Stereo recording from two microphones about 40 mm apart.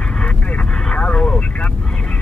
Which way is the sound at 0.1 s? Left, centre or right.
Left.